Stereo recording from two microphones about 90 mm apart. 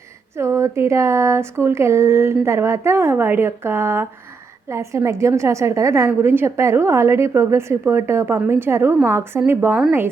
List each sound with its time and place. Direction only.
0.3 s a woman's voice: 30° right (ahead or behind)